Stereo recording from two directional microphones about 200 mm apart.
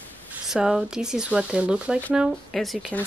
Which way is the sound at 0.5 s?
5° right (ahead or behind).